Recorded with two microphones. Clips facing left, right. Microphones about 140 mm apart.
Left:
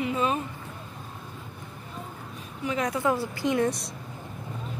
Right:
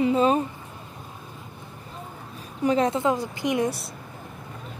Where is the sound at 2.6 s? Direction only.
30° right (ahead or behind).